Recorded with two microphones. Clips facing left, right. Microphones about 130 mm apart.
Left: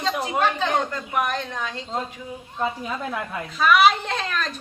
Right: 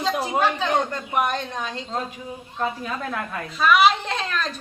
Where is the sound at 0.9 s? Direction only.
25° right (ahead or behind).